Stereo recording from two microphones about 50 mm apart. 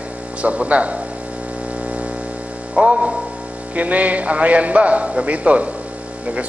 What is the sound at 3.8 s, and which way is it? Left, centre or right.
A man's voice, right.